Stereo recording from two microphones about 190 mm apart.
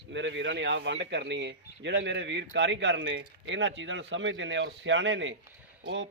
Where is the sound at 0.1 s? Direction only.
70° right (ahead or behind).